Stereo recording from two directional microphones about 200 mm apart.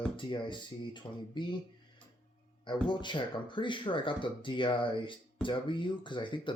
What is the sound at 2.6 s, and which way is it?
Speech, 25° left (ahead or behind).